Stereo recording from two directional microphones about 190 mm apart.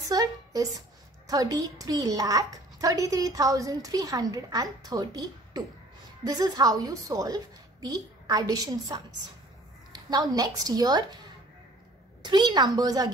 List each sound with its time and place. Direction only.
0.1 s a woman's voice: 20° right (ahead or behind)
12.2 s a woman's voice: 25° right (ahead or behind)